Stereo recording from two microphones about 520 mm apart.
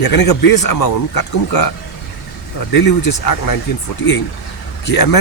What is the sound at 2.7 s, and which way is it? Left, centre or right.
Speech, left.